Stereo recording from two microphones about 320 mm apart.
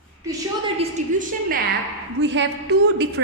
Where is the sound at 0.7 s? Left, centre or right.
Right.